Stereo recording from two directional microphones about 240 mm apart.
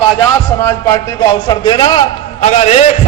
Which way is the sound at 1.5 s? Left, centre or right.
Centre.